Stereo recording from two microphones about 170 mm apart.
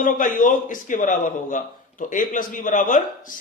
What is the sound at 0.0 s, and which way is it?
A man's voice, 50° left (ahead or behind).